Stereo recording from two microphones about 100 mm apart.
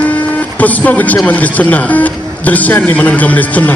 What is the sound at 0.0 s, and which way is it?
Speech, 15° left (ahead or behind).